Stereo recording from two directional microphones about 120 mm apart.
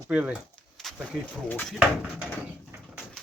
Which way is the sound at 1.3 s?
10° left (ahead or behind).